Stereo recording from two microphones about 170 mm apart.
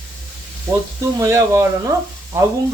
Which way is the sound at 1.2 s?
20° right (ahead or behind).